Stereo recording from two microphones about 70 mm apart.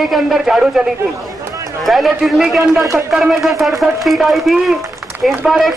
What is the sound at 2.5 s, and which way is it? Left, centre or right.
Speech, right.